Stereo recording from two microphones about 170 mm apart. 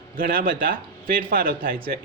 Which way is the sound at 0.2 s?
60° right (ahead or behind).